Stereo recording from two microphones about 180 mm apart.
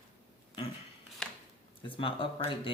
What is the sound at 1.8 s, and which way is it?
Speech, 30° left (ahead or behind).